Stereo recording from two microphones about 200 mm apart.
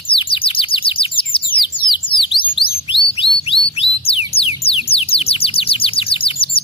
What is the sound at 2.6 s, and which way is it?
Chirp, 25° left (ahead or behind).